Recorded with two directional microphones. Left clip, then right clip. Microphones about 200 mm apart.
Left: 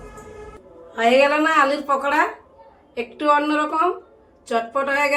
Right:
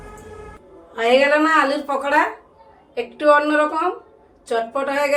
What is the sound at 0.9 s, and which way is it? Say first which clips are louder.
A woman's voice: right 1 dB; 20° left (ahead or behind).